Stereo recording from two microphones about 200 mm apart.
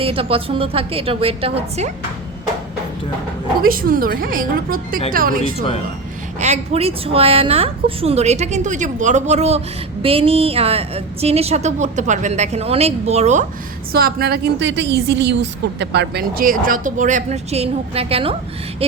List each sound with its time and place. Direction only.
0.0 s a woman's voice: 25° right (ahead or behind)
3.6 s a woman's voice: 45° right (ahead or behind)
6.4 s a woman's voice: 30° right (ahead or behind)
13.9 s a woman's voice: 50° right (ahead or behind); by 19.0 s 30° right (ahead or behind)